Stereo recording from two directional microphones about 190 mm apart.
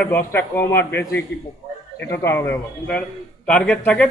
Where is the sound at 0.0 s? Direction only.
10° left (ahead or behind).